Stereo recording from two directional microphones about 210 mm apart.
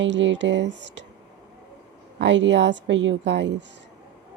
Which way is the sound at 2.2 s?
60° right (ahead or behind).